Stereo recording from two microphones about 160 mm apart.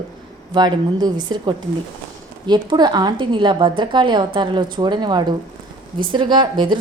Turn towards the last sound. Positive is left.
turn(degrees=-30)  # may be behind; listen again after turning